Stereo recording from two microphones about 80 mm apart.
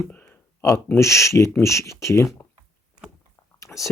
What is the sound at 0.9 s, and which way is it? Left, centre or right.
Speech, left.